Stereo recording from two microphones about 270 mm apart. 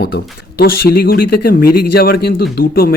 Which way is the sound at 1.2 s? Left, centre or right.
Left.